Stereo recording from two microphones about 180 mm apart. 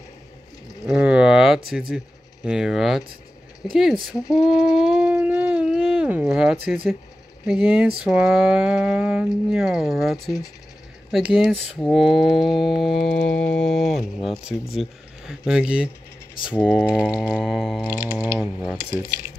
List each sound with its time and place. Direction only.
0.8 s a sound: 5° right (ahead or behind)
1.7 s speech: centre (ahead or behind)
4.4 s dog: centre (ahead or behind)
7.4 s music: 5° right (ahead or behind)
8.0 s speech: 5° right (ahead or behind)
17.8 s music: 10° right (ahead or behind)
18.9 s speech: 50° left (ahead or behind)